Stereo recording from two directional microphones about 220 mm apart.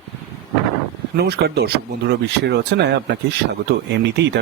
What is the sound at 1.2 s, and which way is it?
Speech, 45° right (ahead or behind).